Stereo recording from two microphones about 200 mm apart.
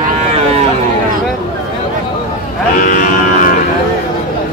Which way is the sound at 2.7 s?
45° left (ahead or behind).